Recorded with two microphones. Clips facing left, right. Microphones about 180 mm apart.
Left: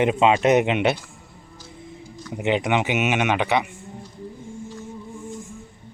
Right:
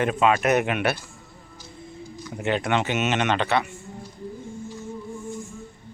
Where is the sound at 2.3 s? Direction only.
15° left (ahead or behind).